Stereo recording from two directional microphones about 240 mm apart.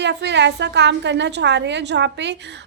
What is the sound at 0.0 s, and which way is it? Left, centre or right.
A woman's voice, right.